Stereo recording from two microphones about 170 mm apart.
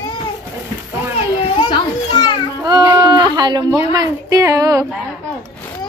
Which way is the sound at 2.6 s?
20° right (ahead or behind).